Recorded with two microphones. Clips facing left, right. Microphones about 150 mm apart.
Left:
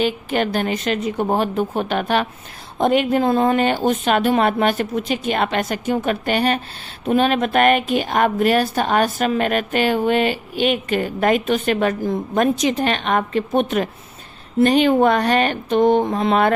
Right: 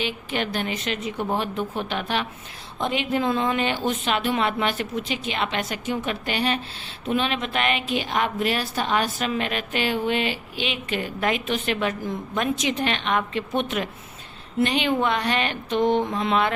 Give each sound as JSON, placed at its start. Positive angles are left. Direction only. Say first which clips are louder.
{"t": 0.0, "sound": "a woman's voice", "louder": "left 8 dB", "side_deg": 45}